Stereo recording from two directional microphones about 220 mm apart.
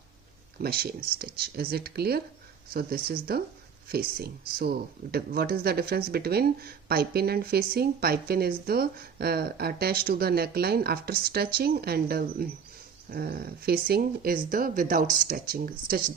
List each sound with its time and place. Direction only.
0.6 s speech: 45° right (ahead or behind)